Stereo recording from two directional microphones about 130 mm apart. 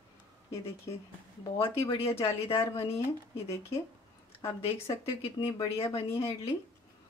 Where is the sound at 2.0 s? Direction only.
50° left (ahead or behind).